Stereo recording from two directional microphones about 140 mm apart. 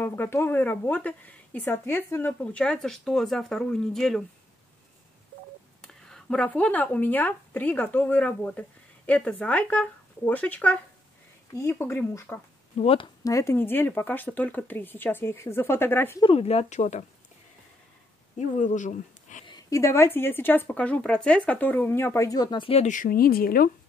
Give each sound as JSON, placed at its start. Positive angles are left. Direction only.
{"t": 0.0, "sound": "a woman's voice", "side_deg": 15}
{"t": 5.8, "sound": "speech", "side_deg": 5}
{"t": 12.7, "sound": "speech", "side_deg": 40}
{"t": 13.2, "sound": "a woman's voice", "side_deg": 20}
{"t": 16.2, "sound": "speech", "side_deg": 40}
{"t": 18.4, "sound": "speech", "side_deg": 55}
{"t": 19.4, "sound": "a woman's voice", "side_deg": 25}
{"t": 22.8, "sound": "speech", "side_deg": 65}